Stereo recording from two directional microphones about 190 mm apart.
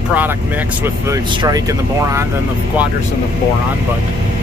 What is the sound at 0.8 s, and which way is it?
Speech, 20° right (ahead or behind).